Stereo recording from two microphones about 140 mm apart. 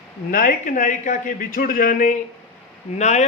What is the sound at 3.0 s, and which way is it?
Speech, 55° left (ahead or behind).